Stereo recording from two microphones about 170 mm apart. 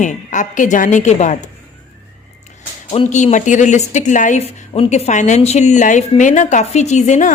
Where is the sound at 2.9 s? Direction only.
40° left (ahead or behind).